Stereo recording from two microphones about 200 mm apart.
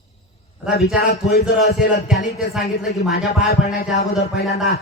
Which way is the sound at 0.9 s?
50° left (ahead or behind).